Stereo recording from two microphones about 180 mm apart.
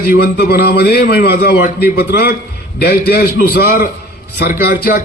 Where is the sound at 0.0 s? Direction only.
55° left (ahead or behind).